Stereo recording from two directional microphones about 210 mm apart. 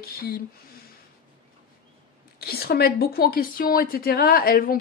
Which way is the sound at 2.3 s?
50° left (ahead or behind).